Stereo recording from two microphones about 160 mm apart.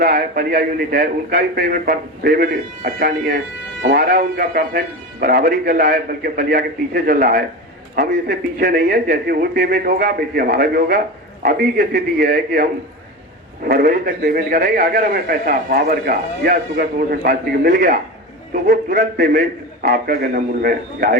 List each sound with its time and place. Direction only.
0.0 s a man's voice: 65° right (ahead or behind)
13.7 s a man's voice: 70° right (ahead or behind)